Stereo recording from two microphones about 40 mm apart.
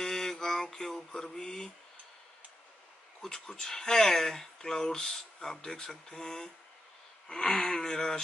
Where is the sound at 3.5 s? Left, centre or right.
Centre.